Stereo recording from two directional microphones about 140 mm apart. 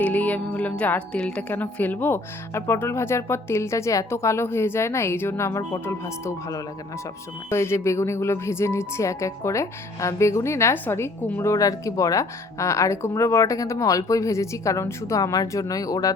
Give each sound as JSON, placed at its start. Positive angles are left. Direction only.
{"t": 0.0, "sound": "a woman's voice", "side_deg": 10}